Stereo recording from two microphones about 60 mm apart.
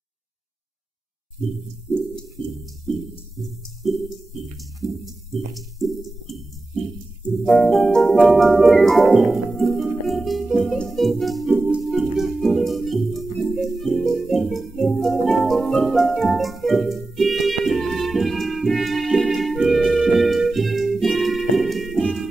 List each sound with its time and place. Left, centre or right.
1.9 s music: centre
7.2 s music: centre